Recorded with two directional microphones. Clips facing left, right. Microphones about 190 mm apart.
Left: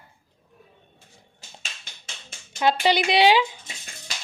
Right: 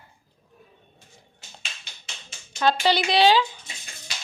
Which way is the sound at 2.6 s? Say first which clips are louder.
Left 1 dB; 15° left (ahead or behind).